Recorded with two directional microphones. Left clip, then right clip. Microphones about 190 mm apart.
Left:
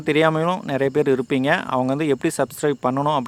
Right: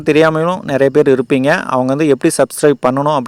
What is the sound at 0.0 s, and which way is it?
Speech, 35° right (ahead or behind).